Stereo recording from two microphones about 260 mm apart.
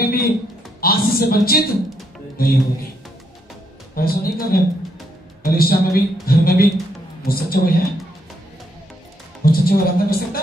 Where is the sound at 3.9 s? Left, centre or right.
Left.